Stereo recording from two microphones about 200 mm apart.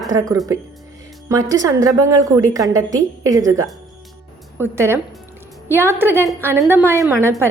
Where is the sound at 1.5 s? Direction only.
15° right (ahead or behind).